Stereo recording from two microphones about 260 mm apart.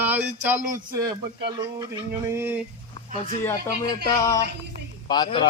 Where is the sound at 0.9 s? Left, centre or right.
Centre.